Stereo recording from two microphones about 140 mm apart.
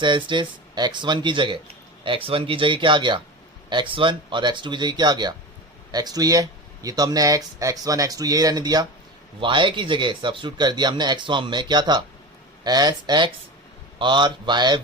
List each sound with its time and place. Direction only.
0.0 s speech: 35° right (ahead or behind)